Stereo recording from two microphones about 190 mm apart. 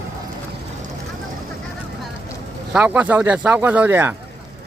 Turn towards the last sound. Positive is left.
turn(degrees=-10)  # may be behind; listen again after turning